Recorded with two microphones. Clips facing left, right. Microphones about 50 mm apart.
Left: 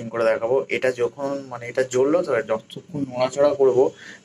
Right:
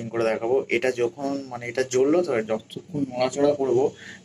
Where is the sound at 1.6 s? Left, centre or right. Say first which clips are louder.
Left 2 dB; centre.